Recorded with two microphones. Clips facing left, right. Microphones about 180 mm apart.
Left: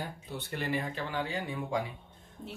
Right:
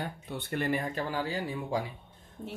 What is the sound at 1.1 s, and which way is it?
Speech, 35° right (ahead or behind).